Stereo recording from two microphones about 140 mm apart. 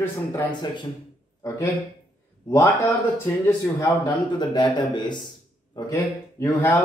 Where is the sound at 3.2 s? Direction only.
20° left (ahead or behind).